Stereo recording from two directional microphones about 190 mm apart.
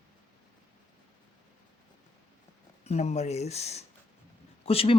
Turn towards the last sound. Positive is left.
turn(degrees=30)  # may be behind; listen again after turning